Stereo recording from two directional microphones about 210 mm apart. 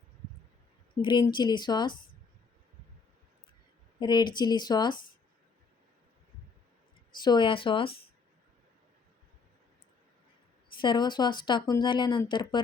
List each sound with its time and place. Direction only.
1.0 s speech: 20° left (ahead or behind)
4.0 s speech: 20° left (ahead or behind)
7.2 s speech: 20° left (ahead or behind)
10.8 s speech: 20° left (ahead or behind)